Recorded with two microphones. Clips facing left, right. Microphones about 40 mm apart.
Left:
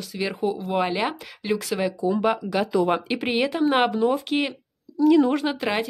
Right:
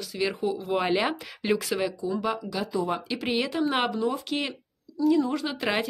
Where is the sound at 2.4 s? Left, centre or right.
Left.